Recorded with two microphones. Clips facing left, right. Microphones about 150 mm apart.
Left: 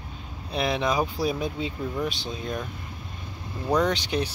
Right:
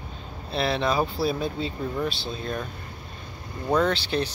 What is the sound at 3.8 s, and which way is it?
Speech, 15° left (ahead or behind).